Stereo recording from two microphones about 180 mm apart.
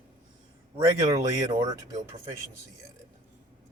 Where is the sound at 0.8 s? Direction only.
20° right (ahead or behind).